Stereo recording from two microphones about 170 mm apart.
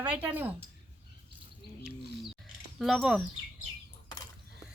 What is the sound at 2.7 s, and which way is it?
Speech, centre (ahead or behind).